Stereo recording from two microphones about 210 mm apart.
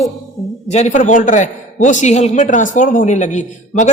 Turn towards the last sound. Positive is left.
turn(degrees=35)  # may be behind; listen again after turning